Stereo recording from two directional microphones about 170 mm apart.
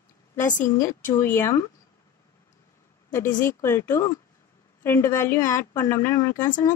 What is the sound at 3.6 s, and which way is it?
A woman's voice, 15° left (ahead or behind).